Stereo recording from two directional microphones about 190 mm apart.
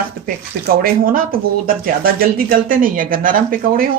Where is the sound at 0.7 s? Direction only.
50° right (ahead or behind).